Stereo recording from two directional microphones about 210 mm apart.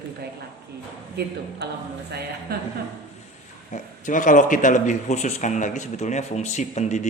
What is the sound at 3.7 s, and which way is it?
Speech, 35° left (ahead or behind).